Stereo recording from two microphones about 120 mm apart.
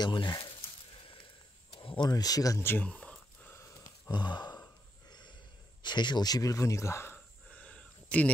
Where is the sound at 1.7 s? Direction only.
45° left (ahead or behind); by 3.5 s 10° left (ahead or behind).